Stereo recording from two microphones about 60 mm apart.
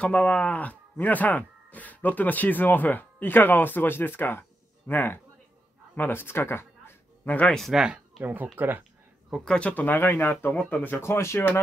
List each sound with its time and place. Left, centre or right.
0.0 s a man's voice: left
7.2 s speech: left
7.5 s speech: centre
8.2 s speech: right
9.4 s speech: centre
11.0 s speech: left